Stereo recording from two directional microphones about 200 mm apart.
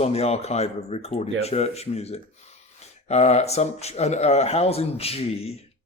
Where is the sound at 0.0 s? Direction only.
30° left (ahead or behind).